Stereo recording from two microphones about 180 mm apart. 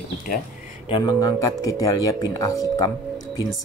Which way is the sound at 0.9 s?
20° left (ahead or behind).